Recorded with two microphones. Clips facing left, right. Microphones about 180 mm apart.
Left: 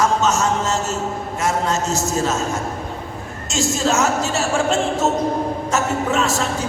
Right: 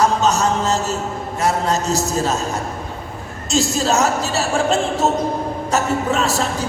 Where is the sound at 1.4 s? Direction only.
35° right (ahead or behind).